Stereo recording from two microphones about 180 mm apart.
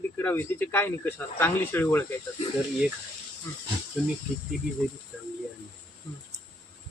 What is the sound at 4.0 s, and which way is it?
Speech, centre (ahead or behind).